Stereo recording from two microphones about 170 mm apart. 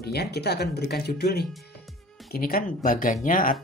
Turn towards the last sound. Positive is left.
turn(degrees=55)  # may be behind; listen again after turning